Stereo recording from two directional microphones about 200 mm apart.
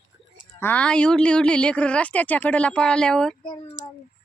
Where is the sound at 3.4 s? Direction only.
25° left (ahead or behind).